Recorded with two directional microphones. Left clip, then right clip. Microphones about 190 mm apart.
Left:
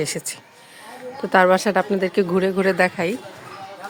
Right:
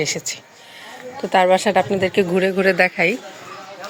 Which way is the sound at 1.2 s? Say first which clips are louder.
Right 1 dB; 25° left (ahead or behind).